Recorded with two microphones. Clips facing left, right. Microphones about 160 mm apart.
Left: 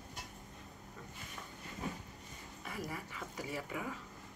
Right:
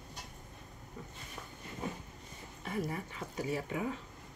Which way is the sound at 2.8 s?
25° right (ahead or behind).